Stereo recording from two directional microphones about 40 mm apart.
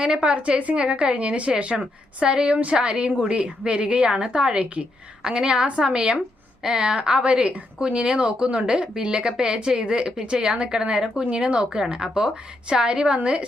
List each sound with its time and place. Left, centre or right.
0.0 s a woman's voice: right
2.2 s speech: right
4.1 s a woman's voice: centre
4.5 s speech: right